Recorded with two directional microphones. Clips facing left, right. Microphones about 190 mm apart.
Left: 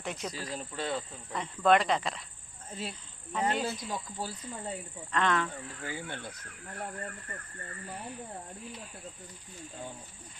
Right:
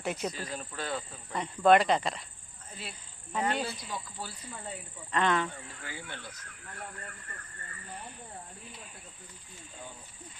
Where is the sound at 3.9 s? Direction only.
40° left (ahead or behind).